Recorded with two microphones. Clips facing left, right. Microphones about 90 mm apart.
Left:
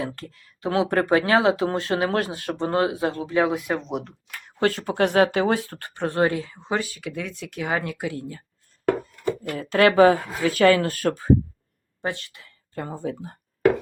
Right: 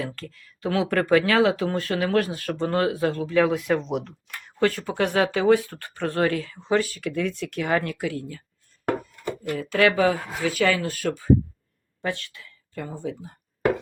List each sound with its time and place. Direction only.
0.0 s speech: 25° left (ahead or behind)
3.5 s speech: 5° left (ahead or behind)
4.4 s a sound: 60° left (ahead or behind)
4.9 s speech: 55° left (ahead or behind)
5.4 s speech: 35° left (ahead or behind)
9.5 s speech: 45° left (ahead or behind)
12.0 s speech: 30° left (ahead or behind)
12.7 s speech: 40° left (ahead or behind)